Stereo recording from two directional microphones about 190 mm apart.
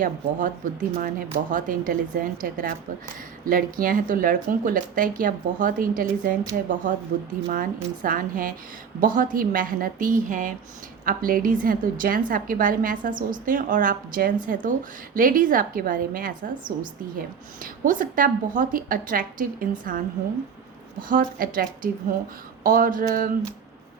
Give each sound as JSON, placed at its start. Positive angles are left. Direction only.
{"t": 0.0, "sound": "a woman's voice", "side_deg": -45}
{"t": 7.4, "sound": "a woman's voice", "side_deg": -45}
{"t": 21.1, "sound": "a woman's voice", "side_deg": -45}